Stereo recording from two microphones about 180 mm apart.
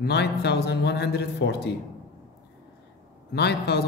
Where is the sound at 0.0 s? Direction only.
65° left (ahead or behind).